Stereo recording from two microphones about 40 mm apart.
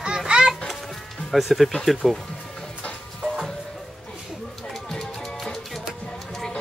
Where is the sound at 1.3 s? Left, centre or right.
Centre.